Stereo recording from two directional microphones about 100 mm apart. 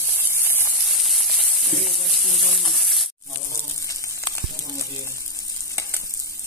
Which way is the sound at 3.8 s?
35° left (ahead or behind).